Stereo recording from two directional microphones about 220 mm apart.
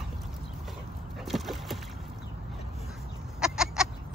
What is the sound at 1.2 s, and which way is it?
Rowboat, centre (ahead or behind).